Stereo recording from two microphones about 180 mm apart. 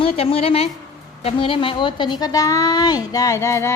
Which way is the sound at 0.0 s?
30° left (ahead or behind).